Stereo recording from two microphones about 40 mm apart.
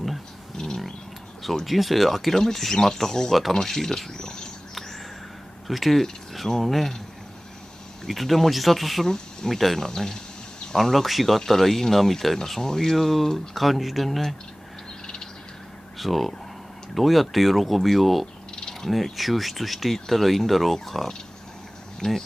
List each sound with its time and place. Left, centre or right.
0.6 s a sound: centre
1.4 s speech: centre
5.7 s speech: centre
8.0 s speech: centre
9.0 s speech: centre
9.8 s speech: centre
16.0 s speech: centre
18.6 s a sound: centre
18.9 s speech: centre
22.0 s speech: centre